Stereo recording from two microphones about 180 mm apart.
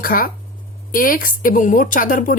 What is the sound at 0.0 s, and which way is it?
Speech, 50° left (ahead or behind).